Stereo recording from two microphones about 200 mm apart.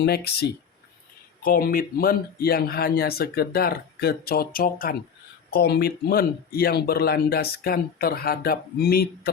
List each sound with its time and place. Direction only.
0.0 s speech: 55° left (ahead or behind)